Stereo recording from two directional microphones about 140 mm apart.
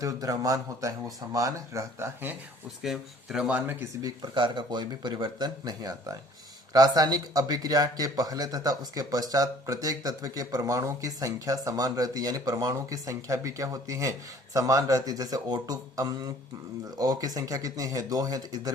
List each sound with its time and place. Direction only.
0.0 s speech: 25° right (ahead or behind)
2.8 s speech: 5° right (ahead or behind)
4.0 s speech: 30° right (ahead or behind)